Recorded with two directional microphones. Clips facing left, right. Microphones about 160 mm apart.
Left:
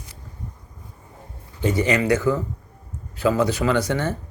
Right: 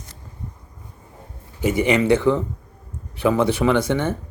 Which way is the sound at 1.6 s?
20° right (ahead or behind).